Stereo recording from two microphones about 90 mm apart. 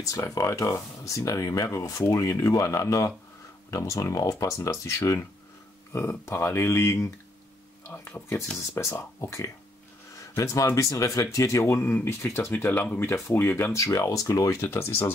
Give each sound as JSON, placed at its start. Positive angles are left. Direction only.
{"t": 0.0, "sound": "speech", "side_deg": 35}
{"t": 7.8, "sound": "a sound", "side_deg": 30}
{"t": 8.7, "sound": "speech", "side_deg": 25}